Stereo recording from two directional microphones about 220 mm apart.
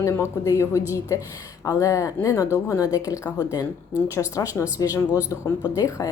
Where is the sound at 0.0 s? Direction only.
15° left (ahead or behind).